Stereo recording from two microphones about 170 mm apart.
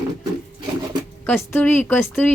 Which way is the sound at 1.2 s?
10° left (ahead or behind).